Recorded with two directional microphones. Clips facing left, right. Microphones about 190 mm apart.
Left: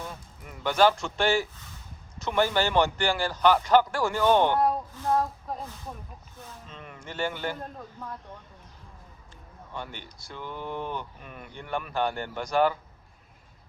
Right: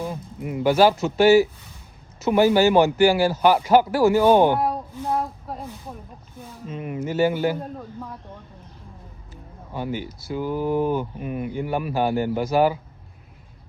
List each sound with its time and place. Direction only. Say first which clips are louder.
0.0 s a sound: right 11 dB; 15° right (ahead or behind)
0.6 s a man's voice: right 5 dB; 10° right (ahead or behind)
9.3 s speech: right 6 dB; 5° right (ahead or behind)
10.4 s speech: right 12 dB; 40° right (ahead or behind)
10.9 s a man's voice: right 12 dB; 10° right (ahead or behind)